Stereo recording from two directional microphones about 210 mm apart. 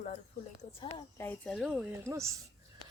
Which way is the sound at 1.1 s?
10° left (ahead or behind).